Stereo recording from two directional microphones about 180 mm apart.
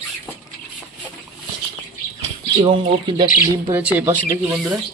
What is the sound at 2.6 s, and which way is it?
Speech, 30° right (ahead or behind).